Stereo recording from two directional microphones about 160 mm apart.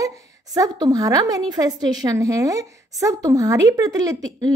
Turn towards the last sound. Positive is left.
turn(degrees=-25)  # may be behind; listen again after turning